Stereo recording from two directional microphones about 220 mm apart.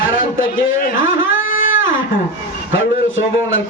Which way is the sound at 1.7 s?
60° left (ahead or behind).